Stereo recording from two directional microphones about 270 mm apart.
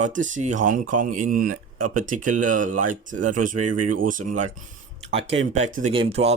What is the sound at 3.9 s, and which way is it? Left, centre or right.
Speech, right.